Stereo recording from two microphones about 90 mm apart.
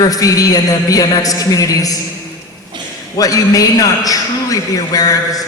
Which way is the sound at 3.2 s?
40° left (ahead or behind).